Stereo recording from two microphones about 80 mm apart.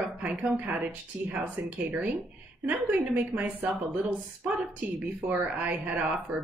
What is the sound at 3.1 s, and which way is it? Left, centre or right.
Speech, right.